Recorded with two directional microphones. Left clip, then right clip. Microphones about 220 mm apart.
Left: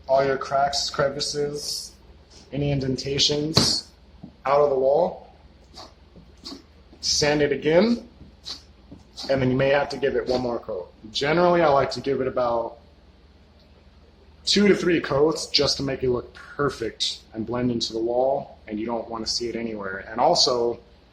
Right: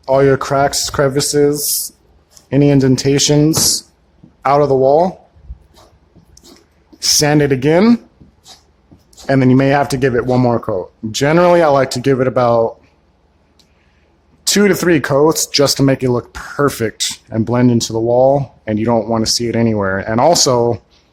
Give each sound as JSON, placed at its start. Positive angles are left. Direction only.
{"t": 0.0, "sound": "speech", "side_deg": -55}
{"t": 2.5, "sound": "speech", "side_deg": -55}
{"t": 4.4, "sound": "speech", "side_deg": -55}
{"t": 7.0, "sound": "speech", "side_deg": -55}
{"t": 9.2, "sound": "speech", "side_deg": -50}
{"t": 14.4, "sound": "speech", "side_deg": -55}